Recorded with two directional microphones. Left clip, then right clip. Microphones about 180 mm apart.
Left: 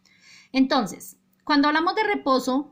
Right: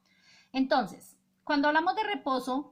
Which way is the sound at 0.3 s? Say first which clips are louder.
Left 6 dB; 25° left (ahead or behind).